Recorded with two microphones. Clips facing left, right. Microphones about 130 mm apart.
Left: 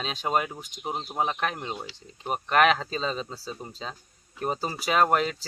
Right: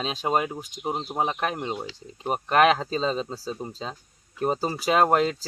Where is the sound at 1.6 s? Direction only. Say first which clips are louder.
Right 4 dB; 25° right (ahead or behind).